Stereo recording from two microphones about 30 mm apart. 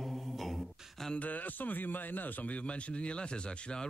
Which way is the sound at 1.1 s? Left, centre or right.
Left.